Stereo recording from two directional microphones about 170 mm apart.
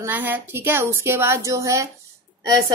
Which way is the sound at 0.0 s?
10° right (ahead or behind).